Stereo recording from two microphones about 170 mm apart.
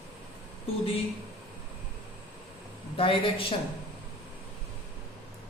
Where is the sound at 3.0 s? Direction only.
30° left (ahead or behind).